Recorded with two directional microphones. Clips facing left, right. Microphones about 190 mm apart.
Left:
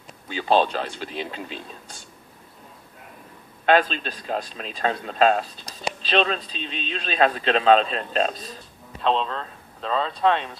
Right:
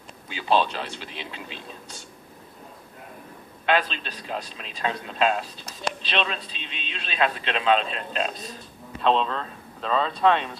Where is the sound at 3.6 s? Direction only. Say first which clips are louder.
Left 5 dB; 45° left (ahead or behind).